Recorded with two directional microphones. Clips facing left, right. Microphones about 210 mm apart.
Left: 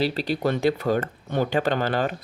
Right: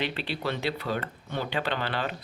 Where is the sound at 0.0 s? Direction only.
40° left (ahead or behind).